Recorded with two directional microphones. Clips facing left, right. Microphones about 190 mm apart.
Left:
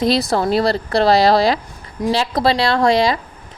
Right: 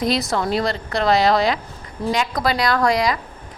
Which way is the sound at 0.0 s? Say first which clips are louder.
Left 4 dB; 30° left (ahead or behind).